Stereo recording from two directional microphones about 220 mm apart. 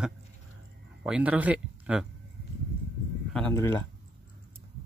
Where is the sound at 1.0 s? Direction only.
5° right (ahead or behind).